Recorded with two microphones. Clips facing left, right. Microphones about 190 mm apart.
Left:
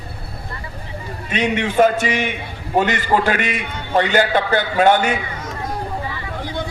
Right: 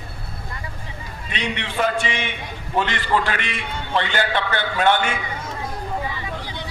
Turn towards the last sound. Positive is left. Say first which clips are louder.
# left 7 dB
turn(degrees=50)  # may be behind; listen again after turning